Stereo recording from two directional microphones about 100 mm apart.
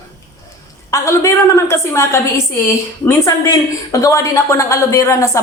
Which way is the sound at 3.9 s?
30° left (ahead or behind).